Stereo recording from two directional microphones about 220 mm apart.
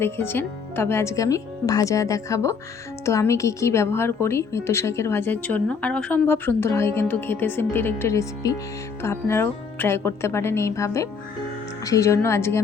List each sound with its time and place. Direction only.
0.0 s a woman's voice: 10° left (ahead or behind)